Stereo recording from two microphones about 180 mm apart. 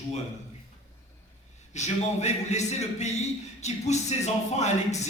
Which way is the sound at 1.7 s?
40° left (ahead or behind).